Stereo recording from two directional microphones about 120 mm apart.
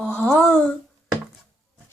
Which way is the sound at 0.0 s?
10° left (ahead or behind).